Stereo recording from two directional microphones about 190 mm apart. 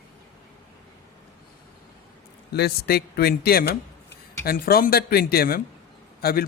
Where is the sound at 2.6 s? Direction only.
60° left (ahead or behind).